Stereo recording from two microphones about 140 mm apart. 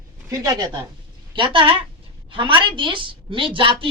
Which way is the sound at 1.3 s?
35° right (ahead or behind).